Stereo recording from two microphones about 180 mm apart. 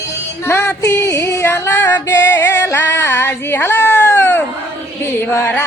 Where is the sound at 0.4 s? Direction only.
15° left (ahead or behind).